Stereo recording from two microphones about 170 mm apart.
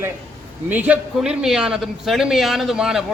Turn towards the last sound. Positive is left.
turn(degrees=0)  # may be behind; listen again after turning